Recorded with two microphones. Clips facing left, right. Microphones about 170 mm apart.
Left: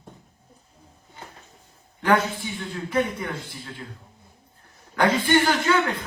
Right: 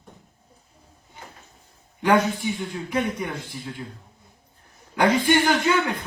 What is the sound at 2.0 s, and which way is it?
A man's voice, 15° right (ahead or behind).